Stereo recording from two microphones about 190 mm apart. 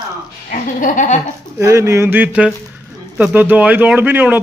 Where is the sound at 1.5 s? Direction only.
15° right (ahead or behind).